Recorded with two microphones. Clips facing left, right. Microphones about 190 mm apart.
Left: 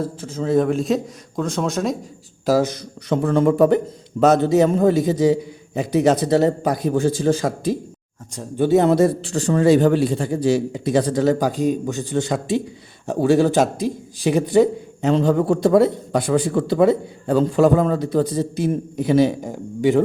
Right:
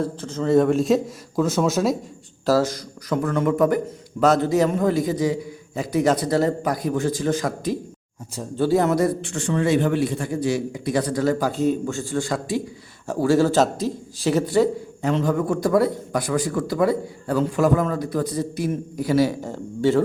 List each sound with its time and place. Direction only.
0.0 s a man's voice: 10° left (ahead or behind)
2.5 s a man's voice: 20° left (ahead or behind)
15.1 s a man's voice: 30° left (ahead or behind)